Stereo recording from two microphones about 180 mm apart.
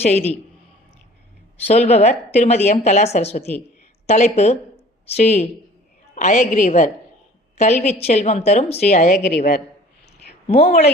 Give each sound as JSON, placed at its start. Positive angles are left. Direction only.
{"t": 0.0, "sound": "a woman's voice", "side_deg": 35}
{"t": 1.6, "sound": "a woman's voice", "side_deg": 35}